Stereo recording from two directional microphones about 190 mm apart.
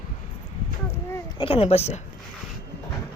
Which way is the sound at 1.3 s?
30° left (ahead or behind).